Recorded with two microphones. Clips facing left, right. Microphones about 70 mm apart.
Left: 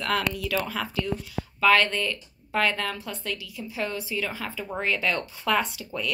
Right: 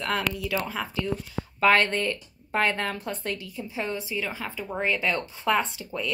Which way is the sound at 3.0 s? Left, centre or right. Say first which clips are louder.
Right 2 dB; right.